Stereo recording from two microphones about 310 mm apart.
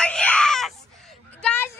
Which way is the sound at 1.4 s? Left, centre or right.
Centre.